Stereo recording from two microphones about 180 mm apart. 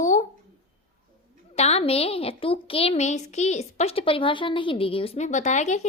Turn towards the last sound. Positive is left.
turn(degrees=40)  # may be behind; listen again after turning